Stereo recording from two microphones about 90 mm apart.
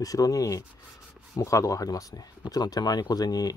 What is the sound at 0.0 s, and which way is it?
Speech, 40° left (ahead or behind).